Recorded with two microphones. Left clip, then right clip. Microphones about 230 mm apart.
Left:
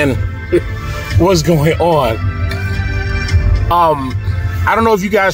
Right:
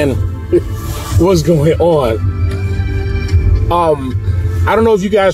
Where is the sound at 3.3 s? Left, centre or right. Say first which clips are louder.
Even; left.